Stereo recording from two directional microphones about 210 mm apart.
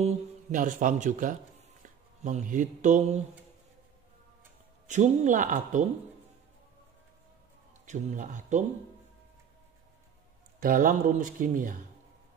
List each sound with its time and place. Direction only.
0.0 s speech: 35° right (ahead or behind)
4.8 s speech: 35° right (ahead or behind)
7.8 s speech: 35° right (ahead or behind)
10.6 s speech: 40° right (ahead or behind)